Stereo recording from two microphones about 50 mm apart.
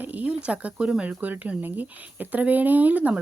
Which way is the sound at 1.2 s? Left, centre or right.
Right.